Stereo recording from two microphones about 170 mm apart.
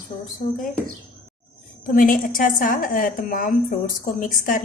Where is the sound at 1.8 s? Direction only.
55° left (ahead or behind).